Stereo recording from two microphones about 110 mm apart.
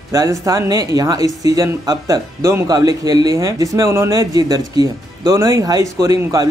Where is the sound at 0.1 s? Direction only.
30° right (ahead or behind).